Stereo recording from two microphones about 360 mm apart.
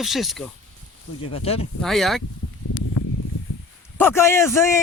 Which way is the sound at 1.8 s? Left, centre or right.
Centre.